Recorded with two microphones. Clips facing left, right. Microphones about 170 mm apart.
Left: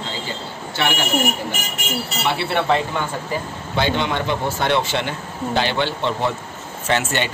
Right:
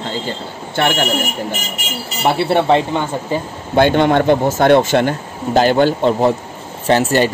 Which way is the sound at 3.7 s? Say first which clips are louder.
Right 9 dB; 50° right (ahead or behind).